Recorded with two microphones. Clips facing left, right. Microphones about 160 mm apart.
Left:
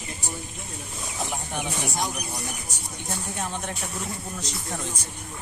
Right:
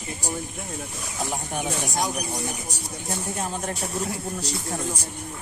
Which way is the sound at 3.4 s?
35° right (ahead or behind).